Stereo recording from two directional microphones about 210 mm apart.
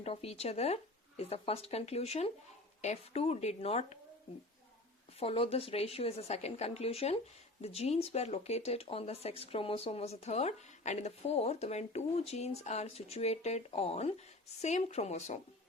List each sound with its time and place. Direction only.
0.0 s speech: 30° left (ahead or behind)
5.2 s speech: 25° left (ahead or behind)